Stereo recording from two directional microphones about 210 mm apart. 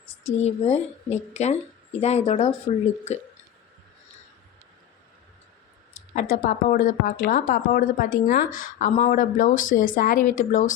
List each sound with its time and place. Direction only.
0.3 s speech: 30° left (ahead or behind)
5.9 s speech: 40° left (ahead or behind)